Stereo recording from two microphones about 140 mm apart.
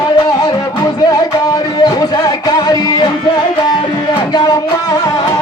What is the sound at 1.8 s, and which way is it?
Music, 30° left (ahead or behind).